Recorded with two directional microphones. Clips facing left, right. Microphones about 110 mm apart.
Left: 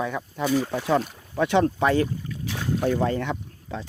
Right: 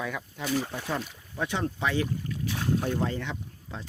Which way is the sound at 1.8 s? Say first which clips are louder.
Left 7 dB; 45° left (ahead or behind).